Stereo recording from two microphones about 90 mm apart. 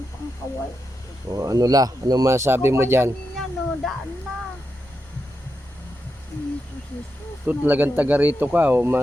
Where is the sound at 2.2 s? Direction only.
30° right (ahead or behind).